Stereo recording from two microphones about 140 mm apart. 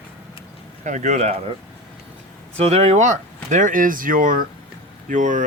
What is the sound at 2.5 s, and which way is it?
Speech, 45° right (ahead or behind).